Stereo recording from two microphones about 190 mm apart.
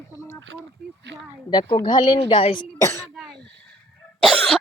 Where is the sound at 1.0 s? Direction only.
65° right (ahead or behind).